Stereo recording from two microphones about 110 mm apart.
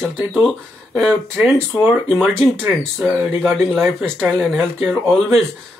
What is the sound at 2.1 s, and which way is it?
Speech, 10° right (ahead or behind).